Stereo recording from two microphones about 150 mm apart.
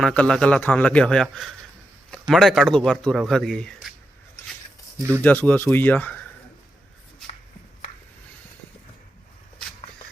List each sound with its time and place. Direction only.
0.0 s a man's voice: 5° left (ahead or behind)
4.9 s speech: 20° right (ahead or behind)
5.2 s speech: 15° left (ahead or behind)